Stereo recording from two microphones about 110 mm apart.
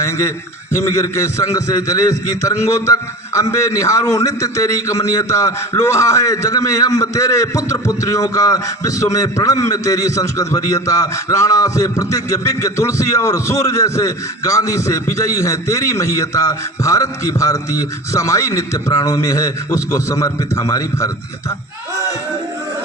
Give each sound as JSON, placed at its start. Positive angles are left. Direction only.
{"t": 0.0, "sound": "a man's voice", "side_deg": 25}